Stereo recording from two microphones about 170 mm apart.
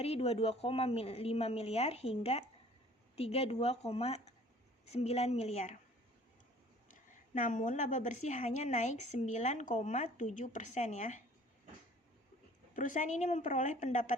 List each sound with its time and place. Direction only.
0.0 s speech: 35° left (ahead or behind)
7.3 s a woman's voice: 50° left (ahead or behind)
12.7 s a woman's voice: 50° left (ahead or behind)